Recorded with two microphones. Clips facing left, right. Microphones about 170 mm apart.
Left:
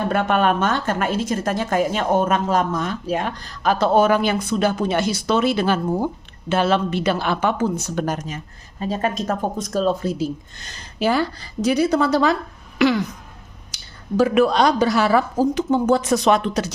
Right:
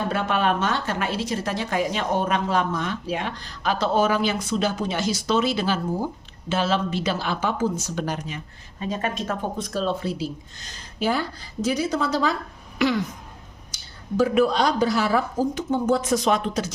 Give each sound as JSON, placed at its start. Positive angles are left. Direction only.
{"t": 0.1, "sound": "a woman's voice", "side_deg": 55}
{"t": 10.7, "sound": "a woman's voice", "side_deg": 75}
{"t": 13.7, "sound": "a sound", "side_deg": 70}
{"t": 14.2, "sound": "a woman's voice", "side_deg": 85}